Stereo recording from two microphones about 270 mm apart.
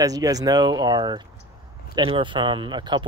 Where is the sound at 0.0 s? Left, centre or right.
Centre.